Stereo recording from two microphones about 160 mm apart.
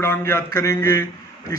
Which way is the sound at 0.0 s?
15° left (ahead or behind).